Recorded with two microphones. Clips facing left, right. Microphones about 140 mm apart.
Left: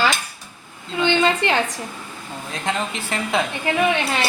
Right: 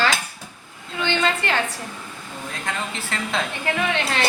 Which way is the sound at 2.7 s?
15° left (ahead or behind).